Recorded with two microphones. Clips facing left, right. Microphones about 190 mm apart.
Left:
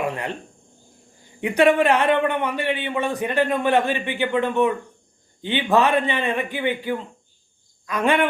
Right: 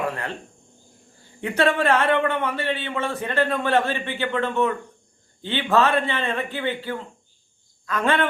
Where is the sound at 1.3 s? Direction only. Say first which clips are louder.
Left 4 dB; 15° left (ahead or behind).